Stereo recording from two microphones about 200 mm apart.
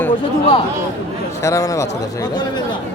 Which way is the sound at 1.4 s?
15° left (ahead or behind).